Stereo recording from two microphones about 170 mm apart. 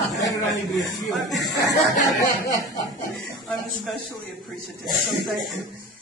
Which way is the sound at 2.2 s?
15° left (ahead or behind).